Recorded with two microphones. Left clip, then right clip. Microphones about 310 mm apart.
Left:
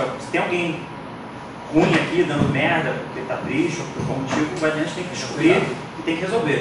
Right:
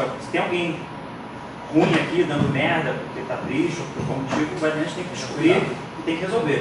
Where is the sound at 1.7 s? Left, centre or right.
Centre.